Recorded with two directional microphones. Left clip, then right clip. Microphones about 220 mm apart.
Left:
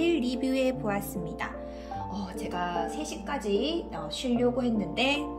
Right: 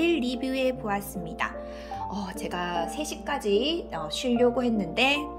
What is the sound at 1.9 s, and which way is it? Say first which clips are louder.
Speech: right 3 dB; 15° right (ahead or behind).